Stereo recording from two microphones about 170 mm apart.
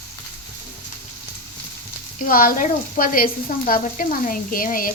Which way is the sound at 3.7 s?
50° left (ahead or behind).